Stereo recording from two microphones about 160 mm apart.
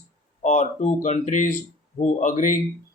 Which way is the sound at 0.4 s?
50° left (ahead or behind).